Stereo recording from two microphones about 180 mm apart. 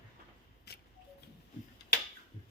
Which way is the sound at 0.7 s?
60° left (ahead or behind).